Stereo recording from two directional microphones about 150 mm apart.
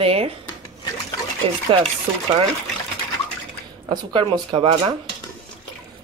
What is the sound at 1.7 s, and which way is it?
Speech, 35° right (ahead or behind).